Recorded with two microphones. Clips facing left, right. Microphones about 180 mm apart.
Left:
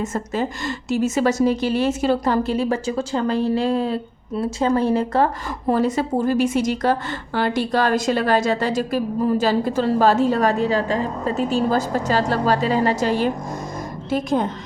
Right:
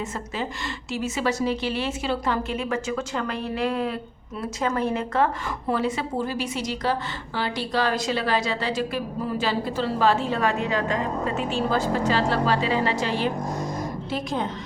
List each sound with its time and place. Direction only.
0.0 s a woman's voice: 45° left (ahead or behind)